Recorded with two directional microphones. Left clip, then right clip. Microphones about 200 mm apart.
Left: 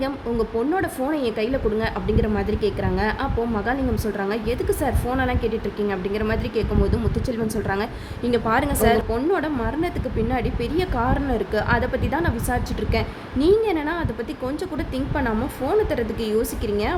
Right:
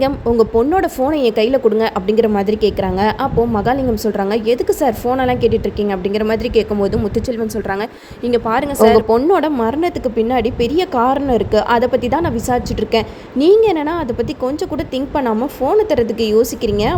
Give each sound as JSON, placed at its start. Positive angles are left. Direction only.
{"t": 0.0, "sound": "a woman's voice", "side_deg": -30}